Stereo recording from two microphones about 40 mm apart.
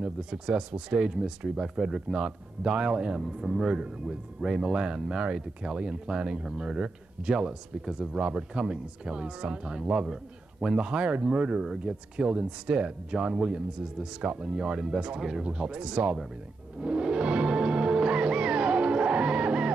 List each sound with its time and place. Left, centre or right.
0.0 s speech: centre
3.1 s speech: centre
3.7 s speech: right
4.4 s speech: centre
4.6 s speech: right
16.8 s music: right